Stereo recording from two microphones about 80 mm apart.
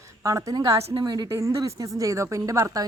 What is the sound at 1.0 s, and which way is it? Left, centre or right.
Speech, right.